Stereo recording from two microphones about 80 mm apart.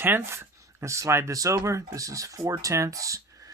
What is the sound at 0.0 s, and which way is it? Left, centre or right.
Speech, right.